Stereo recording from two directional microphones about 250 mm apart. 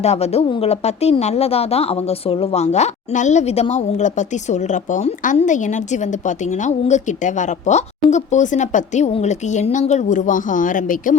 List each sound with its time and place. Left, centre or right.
0.0 s speech: left